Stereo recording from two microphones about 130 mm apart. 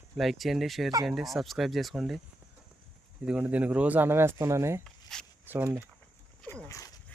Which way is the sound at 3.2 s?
10° right (ahead or behind).